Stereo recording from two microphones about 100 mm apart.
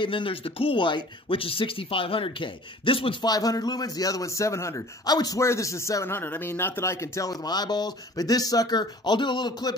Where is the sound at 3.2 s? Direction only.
40° left (ahead or behind).